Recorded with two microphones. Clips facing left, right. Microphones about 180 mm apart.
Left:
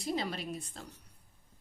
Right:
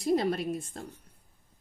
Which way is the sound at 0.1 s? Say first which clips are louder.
Right 9 dB; 55° right (ahead or behind).